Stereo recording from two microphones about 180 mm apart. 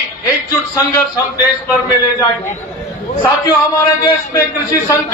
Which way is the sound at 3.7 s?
20° left (ahead or behind).